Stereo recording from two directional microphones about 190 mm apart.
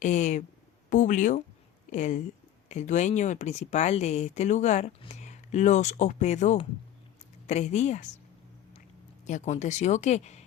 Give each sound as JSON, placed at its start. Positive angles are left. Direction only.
{"t": 0.0, "sound": "speech", "side_deg": 40}
{"t": 9.2, "sound": "speech", "side_deg": 40}